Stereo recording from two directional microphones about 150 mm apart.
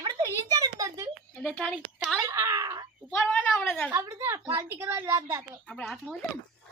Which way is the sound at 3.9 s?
15° right (ahead or behind).